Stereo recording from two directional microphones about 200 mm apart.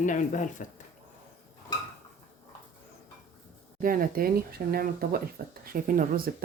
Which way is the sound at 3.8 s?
45° right (ahead or behind).